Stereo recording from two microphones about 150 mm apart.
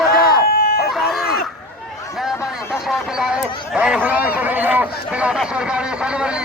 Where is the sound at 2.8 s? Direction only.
Centre (ahead or behind).